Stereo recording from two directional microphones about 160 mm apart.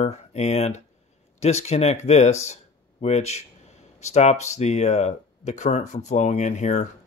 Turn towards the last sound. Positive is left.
turn(degrees=50)  # may be behind; listen again after turning